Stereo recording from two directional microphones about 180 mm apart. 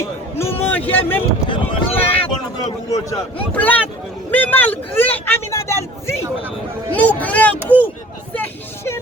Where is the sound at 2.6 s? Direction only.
20° left (ahead or behind).